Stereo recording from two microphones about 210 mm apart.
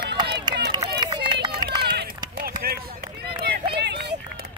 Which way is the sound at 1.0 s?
20° right (ahead or behind).